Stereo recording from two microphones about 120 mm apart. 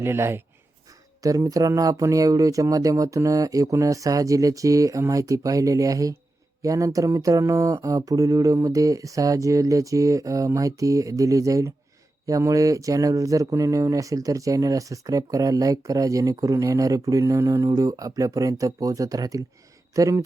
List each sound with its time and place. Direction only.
0.0 s speech: 20° right (ahead or behind)